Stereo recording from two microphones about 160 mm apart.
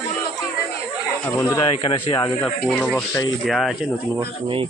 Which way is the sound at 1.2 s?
20° left (ahead or behind).